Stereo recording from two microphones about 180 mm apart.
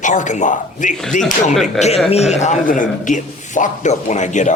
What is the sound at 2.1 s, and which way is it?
A man's voice, 40° left (ahead or behind).